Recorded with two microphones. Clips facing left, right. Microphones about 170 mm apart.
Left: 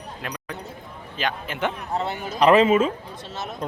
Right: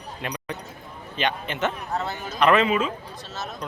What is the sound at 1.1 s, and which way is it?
Speech, 5° left (ahead or behind).